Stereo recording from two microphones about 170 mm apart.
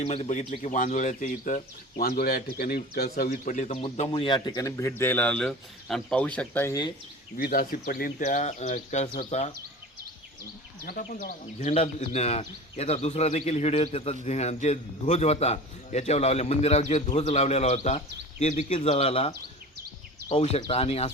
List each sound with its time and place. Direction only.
0.0 s speech: 40° left (ahead or behind); by 6.7 s 10° left (ahead or behind)
7.3 s speech: 60° left (ahead or behind); by 9.5 s 40° left (ahead or behind)
10.8 s speech: 55° left (ahead or behind)
11.6 s speech: 40° left (ahead or behind)